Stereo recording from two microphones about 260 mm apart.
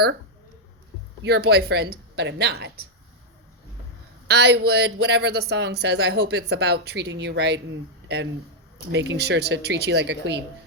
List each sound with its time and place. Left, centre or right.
1.2 s speech: right
4.3 s speech: right